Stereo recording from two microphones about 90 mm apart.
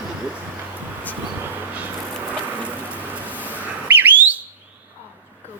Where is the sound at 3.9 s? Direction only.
20° right (ahead or behind).